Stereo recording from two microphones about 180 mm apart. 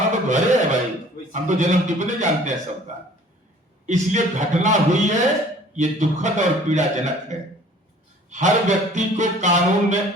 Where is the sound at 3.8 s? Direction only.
40° right (ahead or behind).